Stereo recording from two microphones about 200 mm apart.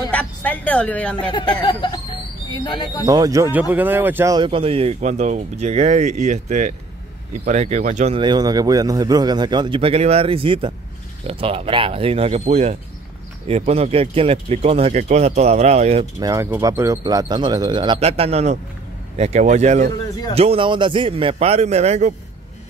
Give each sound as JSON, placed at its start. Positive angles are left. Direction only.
{"t": 0.1, "sound": "speech", "side_deg": 5}
{"t": 1.3, "sound": "speech", "side_deg": 20}
{"t": 3.1, "sound": "speech", "side_deg": -15}
{"t": 4.4, "sound": "a man's voice", "side_deg": -25}
{"t": 16.2, "sound": "a man's voice", "side_deg": -15}